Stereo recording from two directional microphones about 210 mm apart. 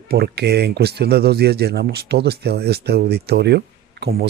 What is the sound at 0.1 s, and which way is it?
Speech, 50° right (ahead or behind).